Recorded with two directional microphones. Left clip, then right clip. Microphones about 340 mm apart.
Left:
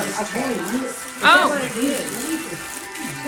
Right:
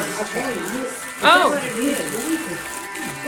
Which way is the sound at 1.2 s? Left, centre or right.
Centre.